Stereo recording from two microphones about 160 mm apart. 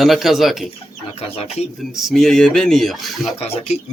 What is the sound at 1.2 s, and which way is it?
Speech, 40° left (ahead or behind).